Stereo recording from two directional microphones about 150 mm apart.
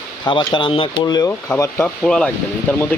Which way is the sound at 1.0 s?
25° left (ahead or behind).